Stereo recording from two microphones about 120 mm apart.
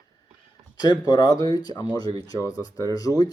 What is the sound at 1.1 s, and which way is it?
Speech, 35° left (ahead or behind).